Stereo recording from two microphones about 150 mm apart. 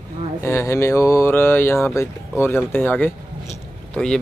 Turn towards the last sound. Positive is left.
turn(degrees=5)  # may be behind; listen again after turning